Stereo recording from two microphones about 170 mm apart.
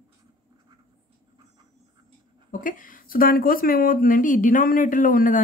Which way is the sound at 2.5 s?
50° left (ahead or behind).